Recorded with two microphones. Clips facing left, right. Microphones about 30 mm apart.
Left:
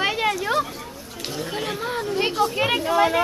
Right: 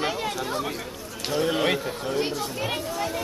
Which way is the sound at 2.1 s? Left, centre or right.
Left.